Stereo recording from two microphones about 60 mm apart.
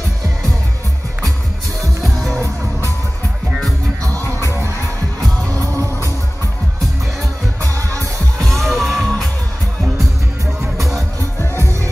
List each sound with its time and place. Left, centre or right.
2.0 s music: centre
4.0 s music: right
5.5 s music: right
7.6 s music: right
8.4 s music: centre
10.8 s music: centre